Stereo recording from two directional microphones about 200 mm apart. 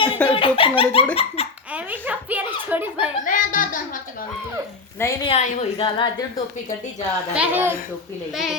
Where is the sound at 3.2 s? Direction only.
40° left (ahead or behind).